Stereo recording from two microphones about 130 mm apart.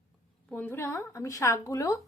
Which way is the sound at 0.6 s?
20° left (ahead or behind).